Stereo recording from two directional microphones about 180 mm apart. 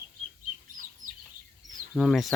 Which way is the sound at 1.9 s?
Centre (ahead or behind).